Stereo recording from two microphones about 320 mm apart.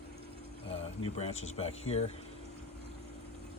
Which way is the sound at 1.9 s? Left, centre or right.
Centre.